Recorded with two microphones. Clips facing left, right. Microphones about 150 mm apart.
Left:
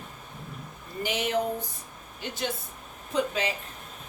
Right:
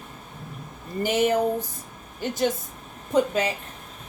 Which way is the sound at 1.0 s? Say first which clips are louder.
Right 8 dB; 45° right (ahead or behind).